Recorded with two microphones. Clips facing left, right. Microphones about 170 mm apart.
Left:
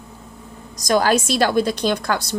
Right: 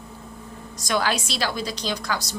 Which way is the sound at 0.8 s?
45° left (ahead or behind).